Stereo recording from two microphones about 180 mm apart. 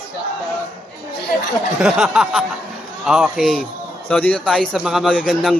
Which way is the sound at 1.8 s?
5° right (ahead or behind).